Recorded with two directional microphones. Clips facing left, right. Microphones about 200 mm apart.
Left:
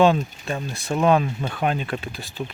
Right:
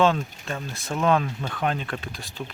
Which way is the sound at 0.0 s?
15° left (ahead or behind).